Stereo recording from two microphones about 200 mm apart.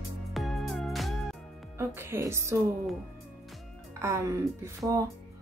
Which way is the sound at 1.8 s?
15° right (ahead or behind).